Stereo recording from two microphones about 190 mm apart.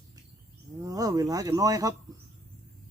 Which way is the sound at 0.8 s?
20° right (ahead or behind).